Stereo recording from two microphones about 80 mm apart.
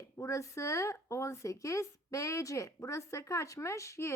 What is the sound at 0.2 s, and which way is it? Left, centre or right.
Speech, left.